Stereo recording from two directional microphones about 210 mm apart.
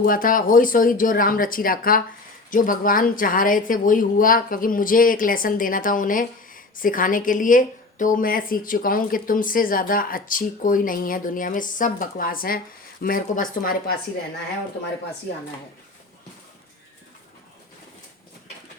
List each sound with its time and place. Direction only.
0.0 s a woman's voice: 40° left (ahead or behind)